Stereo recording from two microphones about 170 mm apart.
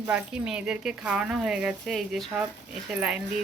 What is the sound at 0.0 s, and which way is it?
Speech, 5° right (ahead or behind).